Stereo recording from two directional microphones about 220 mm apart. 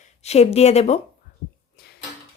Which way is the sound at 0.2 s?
30° left (ahead or behind).